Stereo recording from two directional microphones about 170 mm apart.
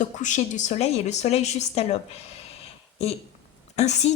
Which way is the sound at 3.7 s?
40° left (ahead or behind).